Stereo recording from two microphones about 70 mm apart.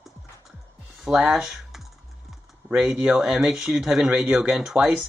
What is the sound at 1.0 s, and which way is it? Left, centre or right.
Speech, centre.